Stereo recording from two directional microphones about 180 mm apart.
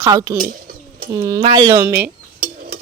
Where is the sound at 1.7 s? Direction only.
15° right (ahead or behind).